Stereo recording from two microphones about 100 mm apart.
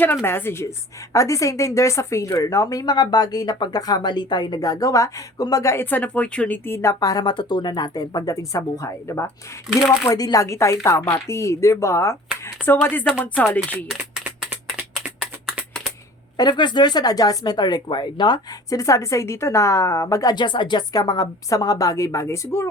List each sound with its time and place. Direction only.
0.0 s a woman's voice: 20° left (ahead or behind)
6.7 s a woman's voice: 30° left (ahead or behind)
13.8 s a sound: 5° right (ahead or behind)
16.4 s speech: 50° left (ahead or behind)
18.8 s a woman's voice: 30° left (ahead or behind)
20.3 s a woman's voice: 50° left (ahead or behind); by 22.4 s 30° left (ahead or behind)